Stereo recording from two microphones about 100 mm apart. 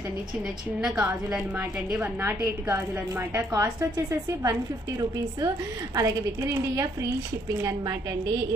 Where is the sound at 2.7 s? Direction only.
25° right (ahead or behind).